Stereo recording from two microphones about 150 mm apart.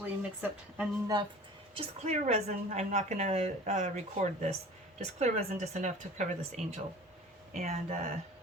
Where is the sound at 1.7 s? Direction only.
50° right (ahead or behind).